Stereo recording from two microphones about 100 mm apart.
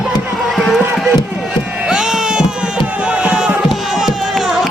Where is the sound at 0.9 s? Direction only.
5° right (ahead or behind).